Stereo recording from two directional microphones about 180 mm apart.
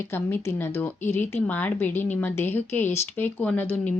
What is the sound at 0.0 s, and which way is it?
Speech, 15° left (ahead or behind).